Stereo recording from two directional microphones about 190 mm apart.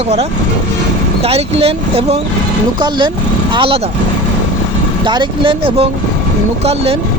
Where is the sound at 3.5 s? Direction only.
25° right (ahead or behind).